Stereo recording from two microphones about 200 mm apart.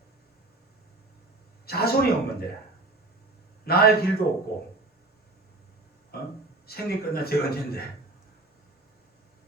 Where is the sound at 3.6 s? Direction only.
50° left (ahead or behind).